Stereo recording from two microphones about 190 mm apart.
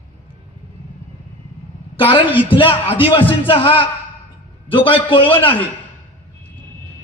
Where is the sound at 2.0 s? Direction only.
30° left (ahead or behind).